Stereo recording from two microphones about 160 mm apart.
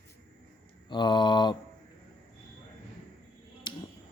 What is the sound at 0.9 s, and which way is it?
Speech, 30° left (ahead or behind).